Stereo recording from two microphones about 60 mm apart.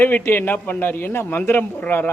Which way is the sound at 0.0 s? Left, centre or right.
Left.